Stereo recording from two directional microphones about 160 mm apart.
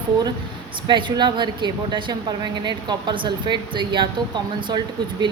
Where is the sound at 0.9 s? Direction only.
30° right (ahead or behind).